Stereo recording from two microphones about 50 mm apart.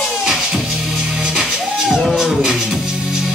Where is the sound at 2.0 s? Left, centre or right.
Centre.